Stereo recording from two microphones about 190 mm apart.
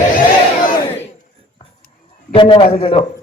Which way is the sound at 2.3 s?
25° left (ahead or behind).